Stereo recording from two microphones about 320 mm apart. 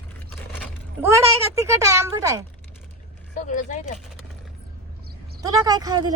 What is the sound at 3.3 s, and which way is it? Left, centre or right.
Speech, left.